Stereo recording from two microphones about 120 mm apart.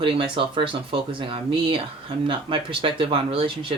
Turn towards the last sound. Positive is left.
turn(degrees=-45)  # may be behind; listen again after turning